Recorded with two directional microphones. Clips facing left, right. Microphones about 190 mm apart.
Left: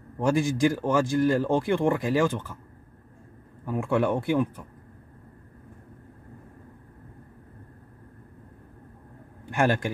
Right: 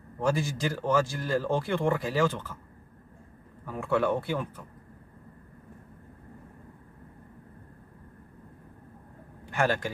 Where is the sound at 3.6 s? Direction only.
15° left (ahead or behind).